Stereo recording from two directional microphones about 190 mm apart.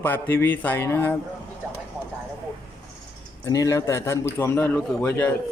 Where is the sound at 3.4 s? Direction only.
20° left (ahead or behind).